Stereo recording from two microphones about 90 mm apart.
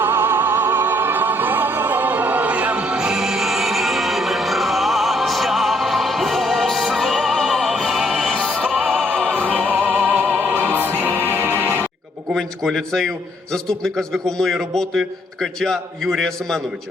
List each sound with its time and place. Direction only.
0.0 s music: 25° right (ahead or behind); by 8.4 s centre (ahead or behind)
8.4 s music: 10° left (ahead or behind)
12.3 s a man's voice: 5° left (ahead or behind)